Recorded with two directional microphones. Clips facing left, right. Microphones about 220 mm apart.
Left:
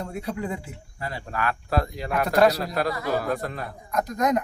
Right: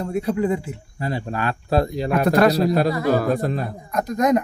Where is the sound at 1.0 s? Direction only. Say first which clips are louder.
Right 5 dB; 25° right (ahead or behind).